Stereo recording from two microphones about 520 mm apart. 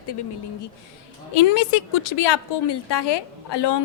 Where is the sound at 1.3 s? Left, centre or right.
Left.